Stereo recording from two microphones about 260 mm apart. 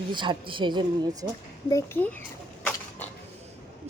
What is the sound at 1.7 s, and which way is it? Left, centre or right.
Speech, centre.